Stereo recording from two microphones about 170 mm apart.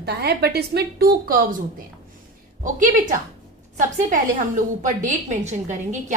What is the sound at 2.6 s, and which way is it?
Speech, 50° right (ahead or behind).